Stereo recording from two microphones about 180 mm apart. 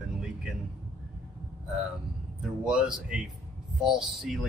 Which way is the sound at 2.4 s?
5° right (ahead or behind).